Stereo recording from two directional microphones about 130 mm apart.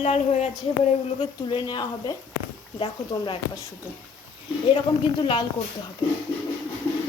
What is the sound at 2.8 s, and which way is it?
Speech, 45° left (ahead or behind).